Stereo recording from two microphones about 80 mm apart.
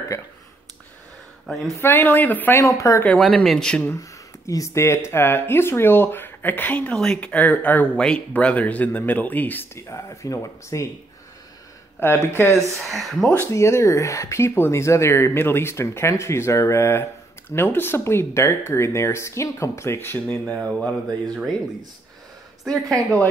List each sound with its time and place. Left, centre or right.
1.8 s speech: left
2.5 s speech: left
3.1 s speech: centre
3.9 s speech: left
9.8 s speech: left
12.3 s speech: left
12.5 s speech: centre
13.5 s speech: left
20.4 s speech: centre
22.7 s speech: centre